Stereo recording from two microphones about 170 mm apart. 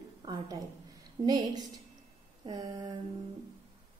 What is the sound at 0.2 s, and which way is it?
A woman's voice, 25° right (ahead or behind).